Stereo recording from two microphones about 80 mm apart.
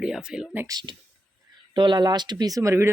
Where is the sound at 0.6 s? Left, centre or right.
Right.